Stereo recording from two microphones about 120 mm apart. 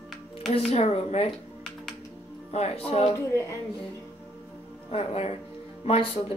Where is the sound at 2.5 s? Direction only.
55° left (ahead or behind).